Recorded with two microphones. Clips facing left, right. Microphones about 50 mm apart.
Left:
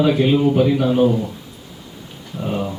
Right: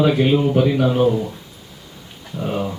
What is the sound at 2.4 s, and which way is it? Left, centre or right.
Speech, centre.